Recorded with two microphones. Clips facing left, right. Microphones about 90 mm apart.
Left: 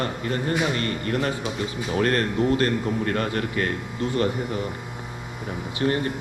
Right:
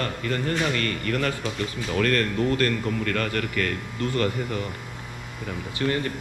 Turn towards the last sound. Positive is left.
turn(degrees=30)  # may be behind; listen again after turning